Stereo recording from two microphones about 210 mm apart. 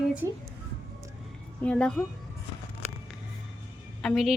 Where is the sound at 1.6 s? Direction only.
5° left (ahead or behind).